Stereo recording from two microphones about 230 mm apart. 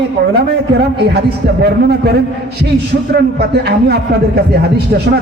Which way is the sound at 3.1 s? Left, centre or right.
Right.